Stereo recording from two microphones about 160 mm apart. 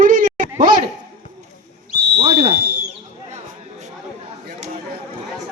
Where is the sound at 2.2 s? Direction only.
40° right (ahead or behind).